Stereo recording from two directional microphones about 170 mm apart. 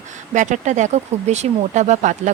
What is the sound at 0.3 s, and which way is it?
Speech, 45° right (ahead or behind).